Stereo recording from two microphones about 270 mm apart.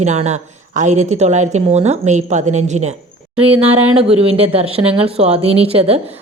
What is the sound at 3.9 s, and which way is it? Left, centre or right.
Speech, right.